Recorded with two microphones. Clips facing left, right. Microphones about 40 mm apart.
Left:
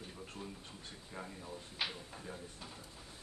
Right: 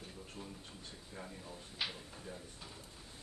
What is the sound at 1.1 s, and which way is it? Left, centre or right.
Speech, centre.